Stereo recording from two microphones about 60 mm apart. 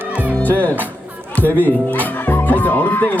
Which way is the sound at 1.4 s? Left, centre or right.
Right.